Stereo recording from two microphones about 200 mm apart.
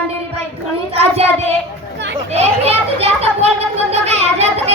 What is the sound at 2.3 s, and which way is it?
Children playing, 30° right (ahead or behind).